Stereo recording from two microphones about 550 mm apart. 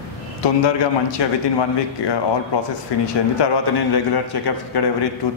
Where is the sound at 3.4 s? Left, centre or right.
Left.